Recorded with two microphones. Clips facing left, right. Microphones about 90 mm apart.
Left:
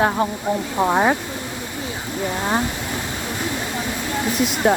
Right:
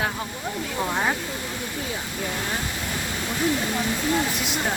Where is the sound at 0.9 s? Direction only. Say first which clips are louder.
Left 8 dB; 75° left (ahead or behind).